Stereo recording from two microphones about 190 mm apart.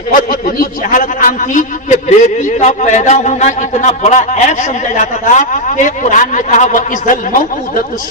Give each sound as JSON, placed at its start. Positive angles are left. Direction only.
{"t": 0.1, "sound": "a man's voice", "side_deg": 50}